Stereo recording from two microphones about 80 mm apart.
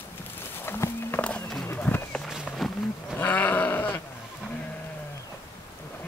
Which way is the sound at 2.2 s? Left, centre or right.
Centre.